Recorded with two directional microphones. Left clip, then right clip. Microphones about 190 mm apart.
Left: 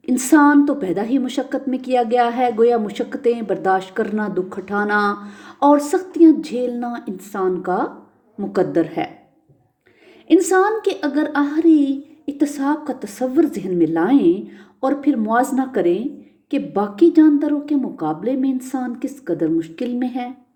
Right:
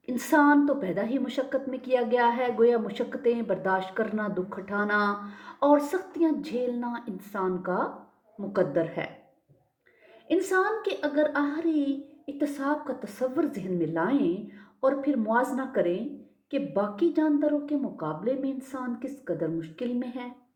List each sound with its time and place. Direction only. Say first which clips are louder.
0.0 s a woman's voice: left 9 dB; 55° left (ahead or behind)
10.2 s a woman's voice: left 10 dB; 55° left (ahead or behind)